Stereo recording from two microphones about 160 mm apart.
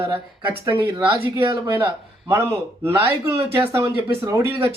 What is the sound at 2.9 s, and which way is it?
Speech, 15° right (ahead or behind).